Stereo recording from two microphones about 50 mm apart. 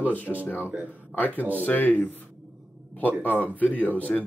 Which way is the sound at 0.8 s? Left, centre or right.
Left.